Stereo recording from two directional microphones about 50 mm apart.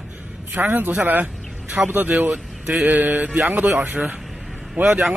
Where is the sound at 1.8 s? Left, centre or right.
Centre.